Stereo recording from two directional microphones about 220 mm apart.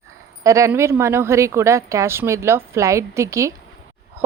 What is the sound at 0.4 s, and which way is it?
A woman's voice, 15° right (ahead or behind).